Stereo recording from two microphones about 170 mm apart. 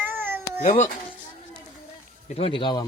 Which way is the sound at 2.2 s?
35° left (ahead or behind).